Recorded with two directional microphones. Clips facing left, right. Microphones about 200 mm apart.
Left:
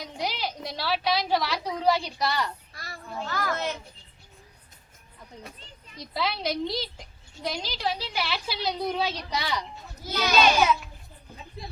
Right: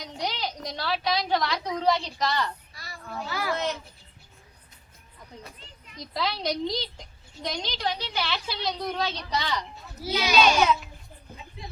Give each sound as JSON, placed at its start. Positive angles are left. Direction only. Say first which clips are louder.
{"t": 0.0, "sound": "a sound", "louder": "even", "side_deg": 5}
{"t": 3.2, "sound": "a child's voice", "louder": "left 1 dB", "side_deg": -10}
{"t": 5.3, "sound": "a woman's voice", "louder": "left 1 dB", "side_deg": 0}
{"t": 10.0, "sound": "a child's voice", "louder": "right 1 dB", "side_deg": -10}
{"t": 10.3, "sound": "a woman's voice", "louder": "even", "side_deg": 0}
{"t": 11.6, "sound": "a sound", "louder": "left 3 dB", "side_deg": 35}